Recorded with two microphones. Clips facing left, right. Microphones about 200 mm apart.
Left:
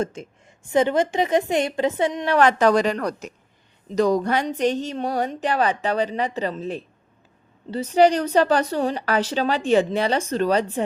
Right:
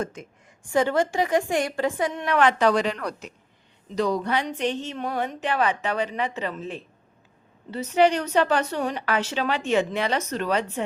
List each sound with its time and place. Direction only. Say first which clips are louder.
0.0 s a woman's voice: left 4 dB; 25° left (ahead or behind)